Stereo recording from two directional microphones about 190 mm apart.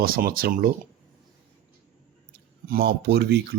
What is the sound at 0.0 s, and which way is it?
Speech, 50° right (ahead or behind).